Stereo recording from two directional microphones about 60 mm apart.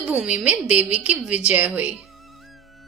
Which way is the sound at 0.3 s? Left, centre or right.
Right.